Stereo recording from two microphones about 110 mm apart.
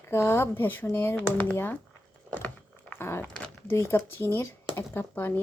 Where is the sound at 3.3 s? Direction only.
10° left (ahead or behind).